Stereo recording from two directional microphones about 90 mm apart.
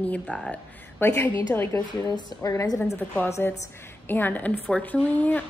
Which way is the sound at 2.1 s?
45° left (ahead or behind).